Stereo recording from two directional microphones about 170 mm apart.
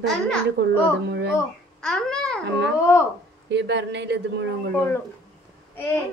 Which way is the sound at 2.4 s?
90° right.